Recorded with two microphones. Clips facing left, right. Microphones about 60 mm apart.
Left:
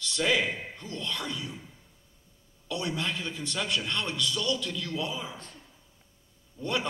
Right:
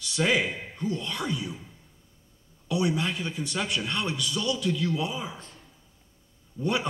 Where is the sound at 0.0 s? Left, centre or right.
Centre.